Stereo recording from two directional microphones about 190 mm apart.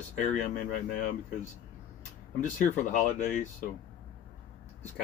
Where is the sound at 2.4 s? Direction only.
45° left (ahead or behind).